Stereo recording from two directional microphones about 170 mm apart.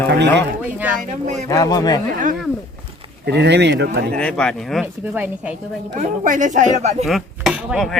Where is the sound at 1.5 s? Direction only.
20° left (ahead or behind).